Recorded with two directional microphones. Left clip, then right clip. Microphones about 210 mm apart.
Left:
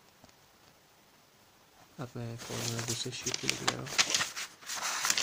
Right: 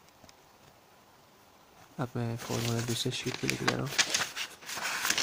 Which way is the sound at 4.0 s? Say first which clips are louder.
Left 1 dB; 15° left (ahead or behind).